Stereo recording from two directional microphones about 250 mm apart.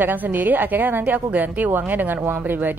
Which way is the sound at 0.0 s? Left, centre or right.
Centre.